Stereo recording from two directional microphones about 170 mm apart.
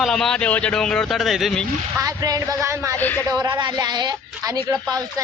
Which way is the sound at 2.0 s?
20° right (ahead or behind).